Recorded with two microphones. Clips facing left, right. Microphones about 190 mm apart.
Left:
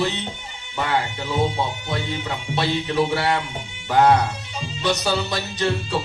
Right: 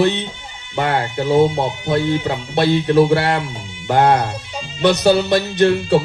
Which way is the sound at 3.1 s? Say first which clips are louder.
Right 5 dB; 55° right (ahead or behind).